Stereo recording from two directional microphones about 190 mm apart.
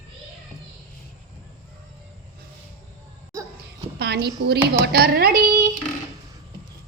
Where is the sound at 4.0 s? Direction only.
60° right (ahead or behind).